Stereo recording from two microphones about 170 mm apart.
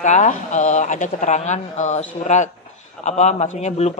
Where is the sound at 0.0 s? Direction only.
45° left (ahead or behind).